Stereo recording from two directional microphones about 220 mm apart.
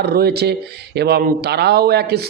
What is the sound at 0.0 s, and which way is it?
Speech, 45° right (ahead or behind).